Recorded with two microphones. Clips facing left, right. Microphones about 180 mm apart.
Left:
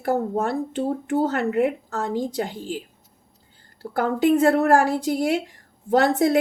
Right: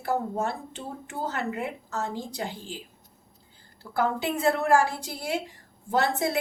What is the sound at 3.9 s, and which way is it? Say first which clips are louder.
A woman's voice: left 8 dB; 50° left (ahead or behind).